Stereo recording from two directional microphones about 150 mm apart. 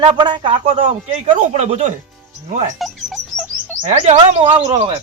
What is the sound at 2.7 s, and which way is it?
Chirp, centre (ahead or behind).